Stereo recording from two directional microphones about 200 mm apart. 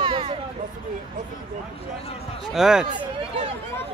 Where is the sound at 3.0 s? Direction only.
25° right (ahead or behind).